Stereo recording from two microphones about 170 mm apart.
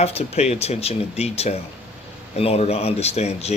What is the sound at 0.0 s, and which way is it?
Speech, 40° left (ahead or behind).